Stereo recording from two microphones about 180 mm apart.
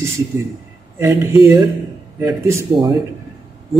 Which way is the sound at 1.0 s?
15° right (ahead or behind).